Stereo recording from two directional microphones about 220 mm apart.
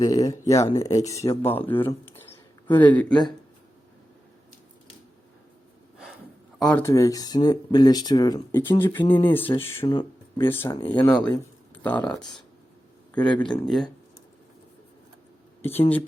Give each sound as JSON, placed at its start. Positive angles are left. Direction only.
{"t": 0.0, "sound": "speech", "side_deg": 15}
{"t": 6.6, "sound": "speech", "side_deg": 5}
{"t": 8.8, "sound": "speech", "side_deg": 10}
{"t": 13.2, "sound": "speech", "side_deg": 20}
{"t": 13.5, "sound": "speech", "side_deg": 0}